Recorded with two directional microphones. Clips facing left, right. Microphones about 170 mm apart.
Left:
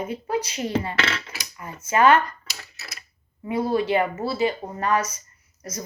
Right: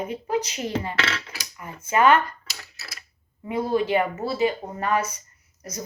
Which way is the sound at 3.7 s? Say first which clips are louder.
Right 1 dB; 35° left (ahead or behind).